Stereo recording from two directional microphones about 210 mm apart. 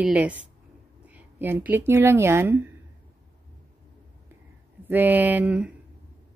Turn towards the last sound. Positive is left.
turn(degrees=-5)  # may be behind; listen again after turning